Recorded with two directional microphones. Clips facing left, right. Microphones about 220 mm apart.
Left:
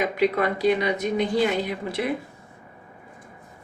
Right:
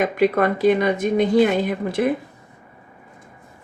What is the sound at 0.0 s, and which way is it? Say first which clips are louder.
A woman's voice: right 4 dB; 50° right (ahead or behind).